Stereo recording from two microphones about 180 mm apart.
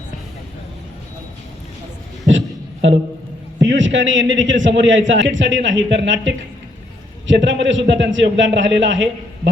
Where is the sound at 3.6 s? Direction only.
90° right.